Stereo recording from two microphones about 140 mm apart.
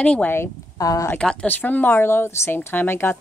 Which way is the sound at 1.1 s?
10° left (ahead or behind).